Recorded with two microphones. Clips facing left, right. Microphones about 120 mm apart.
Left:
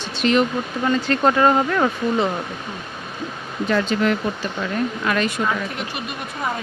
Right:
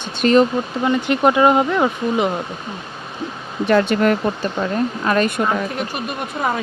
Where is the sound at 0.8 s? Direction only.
15° right (ahead or behind).